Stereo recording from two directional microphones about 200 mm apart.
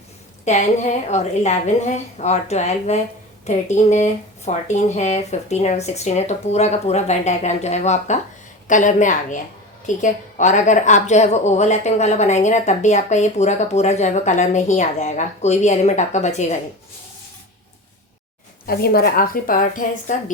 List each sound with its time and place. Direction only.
0.4 s a woman's voice: 35° left (ahead or behind)
18.6 s a woman's voice: 50° left (ahead or behind)